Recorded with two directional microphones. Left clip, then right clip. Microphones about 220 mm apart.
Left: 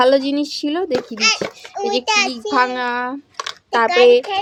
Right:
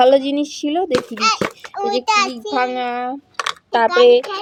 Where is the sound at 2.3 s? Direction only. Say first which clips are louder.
Left 2 dB; 15° left (ahead or behind).